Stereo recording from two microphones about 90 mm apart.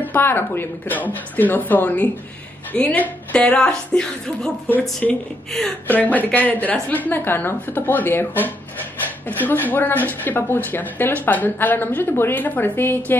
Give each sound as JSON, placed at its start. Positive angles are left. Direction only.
{"t": 0.0, "sound": "a woman's voice", "side_deg": 20}
{"t": 4.6, "sound": "a woman's voice", "side_deg": 20}